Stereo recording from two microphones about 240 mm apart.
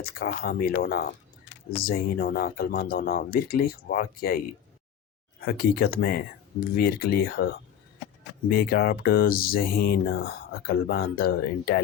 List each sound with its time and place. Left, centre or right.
0.0 s speech: left
5.5 s speech: left